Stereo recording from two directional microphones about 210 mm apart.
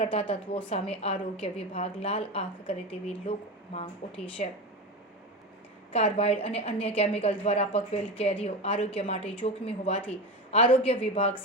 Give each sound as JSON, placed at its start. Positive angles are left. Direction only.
{"t": 0.0, "sound": "a woman's voice", "side_deg": 25}
{"t": 5.9, "sound": "a woman's voice", "side_deg": 30}